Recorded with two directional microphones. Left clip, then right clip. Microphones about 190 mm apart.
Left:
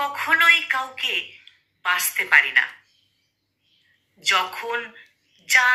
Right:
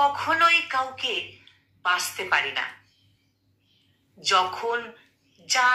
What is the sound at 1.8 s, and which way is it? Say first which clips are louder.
Speech: left 3 dB; 15° left (ahead or behind).